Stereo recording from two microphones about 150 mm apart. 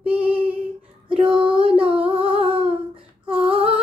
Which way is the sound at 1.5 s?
35° right (ahead or behind).